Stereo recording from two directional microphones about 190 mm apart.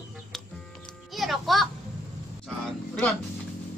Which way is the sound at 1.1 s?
Centre (ahead or behind).